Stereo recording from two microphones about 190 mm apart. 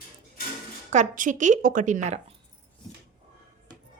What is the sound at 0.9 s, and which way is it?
Speech, 40° right (ahead or behind).